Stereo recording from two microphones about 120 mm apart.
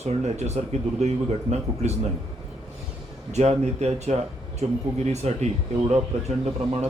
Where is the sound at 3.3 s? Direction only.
65° right (ahead or behind).